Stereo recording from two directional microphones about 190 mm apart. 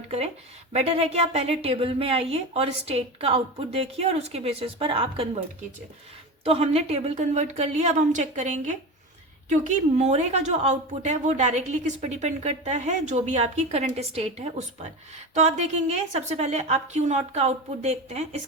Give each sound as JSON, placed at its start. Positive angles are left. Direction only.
{"t": 0.7, "sound": "a woman's voice", "side_deg": -35}
{"t": 6.4, "sound": "a woman's voice", "side_deg": -30}
{"t": 15.4, "sound": "a woman's voice", "side_deg": -35}